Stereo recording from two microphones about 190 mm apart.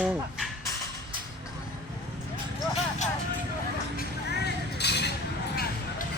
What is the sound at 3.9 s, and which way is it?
Vehicle, 60° left (ahead or behind).